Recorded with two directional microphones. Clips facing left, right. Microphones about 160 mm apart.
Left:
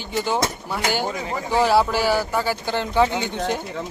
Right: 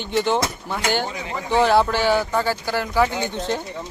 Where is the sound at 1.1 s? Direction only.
40° left (ahead or behind).